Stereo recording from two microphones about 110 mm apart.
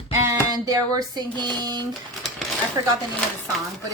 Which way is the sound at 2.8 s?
35° right (ahead or behind).